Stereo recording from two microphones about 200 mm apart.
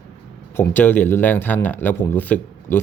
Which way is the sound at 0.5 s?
10° left (ahead or behind).